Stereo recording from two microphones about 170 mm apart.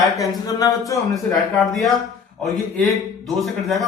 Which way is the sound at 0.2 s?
20° left (ahead or behind).